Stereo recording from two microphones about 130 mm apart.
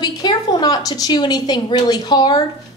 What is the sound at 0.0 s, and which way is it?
A woman's voice, 35° left (ahead or behind).